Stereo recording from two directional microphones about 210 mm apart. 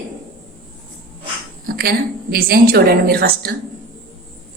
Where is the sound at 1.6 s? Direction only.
45° right (ahead or behind).